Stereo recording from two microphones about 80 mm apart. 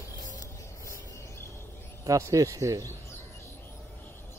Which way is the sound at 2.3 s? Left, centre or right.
Right.